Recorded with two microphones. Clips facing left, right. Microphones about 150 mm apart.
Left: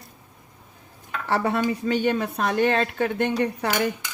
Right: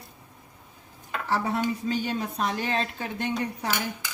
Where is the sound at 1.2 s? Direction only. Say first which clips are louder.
Left 4 dB; 65° left (ahead or behind).